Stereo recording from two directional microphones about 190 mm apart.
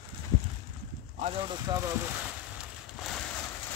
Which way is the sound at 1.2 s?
30° right (ahead or behind).